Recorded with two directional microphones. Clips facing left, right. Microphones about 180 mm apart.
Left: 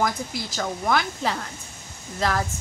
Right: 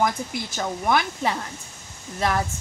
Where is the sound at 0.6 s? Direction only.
20° right (ahead or behind).